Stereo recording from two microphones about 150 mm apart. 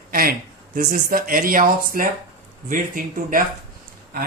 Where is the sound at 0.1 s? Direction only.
75° right (ahead or behind).